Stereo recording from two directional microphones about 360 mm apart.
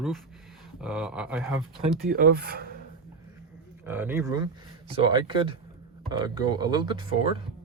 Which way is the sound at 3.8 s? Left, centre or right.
Centre.